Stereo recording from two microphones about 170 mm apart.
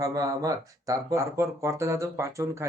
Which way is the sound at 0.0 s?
20° right (ahead or behind).